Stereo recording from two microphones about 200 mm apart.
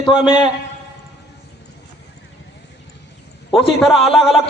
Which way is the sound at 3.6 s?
30° left (ahead or behind).